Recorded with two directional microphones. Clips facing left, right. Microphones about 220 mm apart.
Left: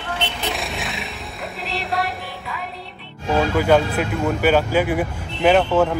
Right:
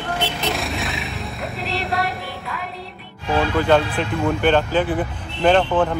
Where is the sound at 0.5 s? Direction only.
Centre (ahead or behind).